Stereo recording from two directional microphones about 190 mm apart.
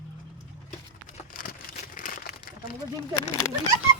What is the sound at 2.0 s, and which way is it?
Crumpling, 45° left (ahead or behind).